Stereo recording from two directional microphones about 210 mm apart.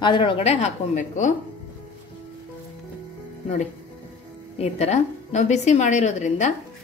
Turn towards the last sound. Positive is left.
turn(degrees=35)  # may be behind; listen again after turning